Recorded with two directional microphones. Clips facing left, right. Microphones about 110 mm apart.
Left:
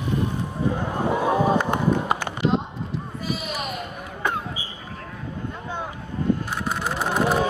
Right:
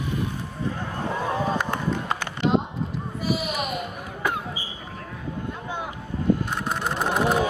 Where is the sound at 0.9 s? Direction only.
15° left (ahead or behind).